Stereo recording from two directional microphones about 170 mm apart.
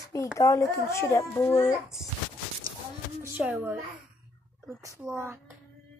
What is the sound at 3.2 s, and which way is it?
Speech, 10° right (ahead or behind).